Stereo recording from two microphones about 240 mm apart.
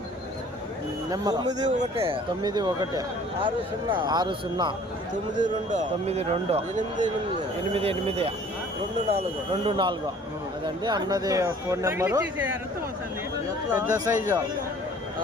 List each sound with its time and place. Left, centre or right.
1.1 s speech: centre
1.5 s a man's voice: right
5.4 s a man's voice: right
7.7 s a man's voice: right
13.7 s speech: centre